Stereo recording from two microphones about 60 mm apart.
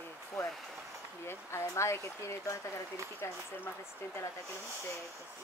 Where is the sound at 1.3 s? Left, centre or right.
Left.